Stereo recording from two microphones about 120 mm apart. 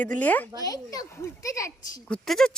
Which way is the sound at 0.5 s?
30° left (ahead or behind).